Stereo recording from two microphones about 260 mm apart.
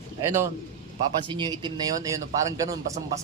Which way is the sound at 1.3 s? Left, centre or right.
Centre.